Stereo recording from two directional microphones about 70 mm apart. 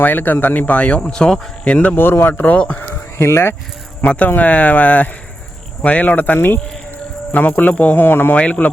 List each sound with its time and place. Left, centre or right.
0.0 s speech: left
2.0 s speech: left
3.2 s speech: left
4.0 s speech: centre
8.4 s speech: centre